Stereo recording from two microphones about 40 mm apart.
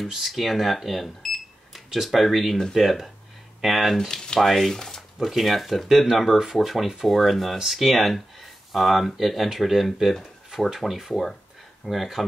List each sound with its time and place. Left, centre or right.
0.1 s speech: centre
4.1 s a sound: centre
4.4 s speech: centre
5.3 s speech: centre